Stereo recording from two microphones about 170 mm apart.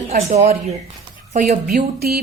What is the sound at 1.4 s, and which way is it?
Speech, 65° right (ahead or behind).